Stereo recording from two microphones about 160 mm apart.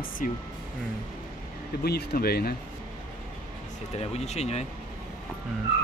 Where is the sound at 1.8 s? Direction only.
75° left (ahead or behind).